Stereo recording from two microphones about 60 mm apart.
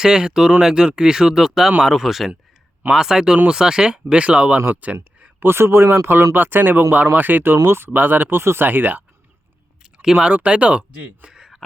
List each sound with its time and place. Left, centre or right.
0.0 s speech: centre
5.2 s a man's voice: right
10.0 s speech: centre